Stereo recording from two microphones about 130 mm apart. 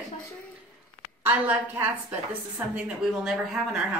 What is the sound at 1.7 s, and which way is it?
Speech, 15° right (ahead or behind).